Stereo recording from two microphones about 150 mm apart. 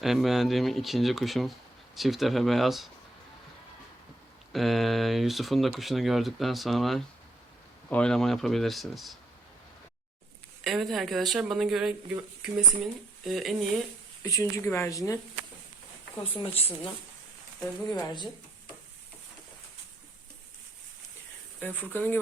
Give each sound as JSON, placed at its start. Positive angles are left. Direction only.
{"t": 0.0, "sound": "speech", "side_deg": 0}
{"t": 4.5, "sound": "speech", "side_deg": 0}
{"t": 10.6, "sound": "speech", "side_deg": 0}
{"t": 14.2, "sound": "speech", "side_deg": 20}
{"t": 16.4, "sound": "speech", "side_deg": 40}
{"t": 17.9, "sound": "speech", "side_deg": 30}
{"t": 21.6, "sound": "speech", "side_deg": 10}